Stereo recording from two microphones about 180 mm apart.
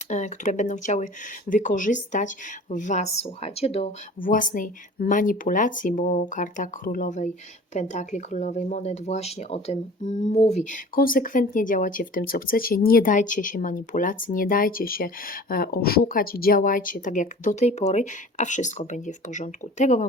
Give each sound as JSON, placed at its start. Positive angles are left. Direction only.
{"t": 0.1, "sound": "speech", "side_deg": 40}
{"t": 4.2, "sound": "speech", "side_deg": 50}